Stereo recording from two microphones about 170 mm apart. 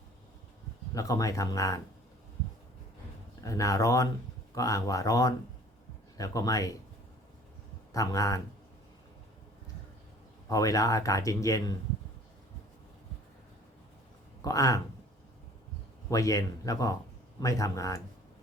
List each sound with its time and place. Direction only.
0.9 s speech: 20° left (ahead or behind)
3.4 s speech: 20° left (ahead or behind)
7.9 s speech: 20° left (ahead or behind)
10.5 s speech: 20° left (ahead or behind)
14.4 s speech: 20° left (ahead or behind)
16.0 s speech: 20° left (ahead or behind)